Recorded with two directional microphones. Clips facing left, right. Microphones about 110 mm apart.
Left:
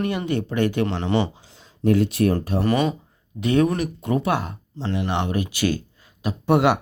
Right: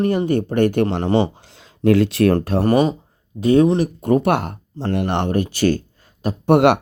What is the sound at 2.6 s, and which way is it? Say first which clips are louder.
Speech: right 4 dB; 40° right (ahead or behind).